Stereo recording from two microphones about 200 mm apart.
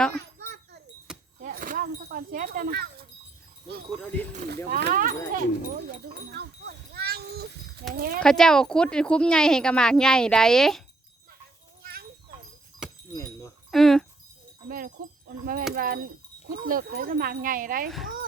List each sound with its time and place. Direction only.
0.3 s a sound: 55° right (ahead or behind)
1.4 s a sound: 45° right (ahead or behind)
4.0 s speech: 10° left (ahead or behind)
4.4 s speech: 55° right (ahead or behind)
4.9 s speech: 45° right (ahead or behind)
6.3 s a sound: 55° right (ahead or behind)
7.9 s speech: 50° right (ahead or behind)
8.2 s speech: 5° left (ahead or behind)
11.8 s a sound: 50° right (ahead or behind)
13.1 s keys jangling: 15° left (ahead or behind)
13.7 s speech: centre (ahead or behind)
14.7 s speech: 45° right (ahead or behind)
17.8 s speech: centre (ahead or behind)